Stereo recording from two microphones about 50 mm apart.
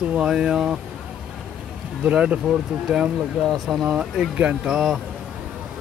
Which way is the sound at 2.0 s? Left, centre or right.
Right.